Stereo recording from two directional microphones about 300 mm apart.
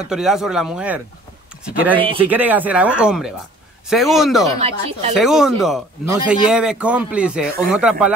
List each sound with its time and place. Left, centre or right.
0.0 s speech: centre
4.6 s speech: right
5.1 s speech: centre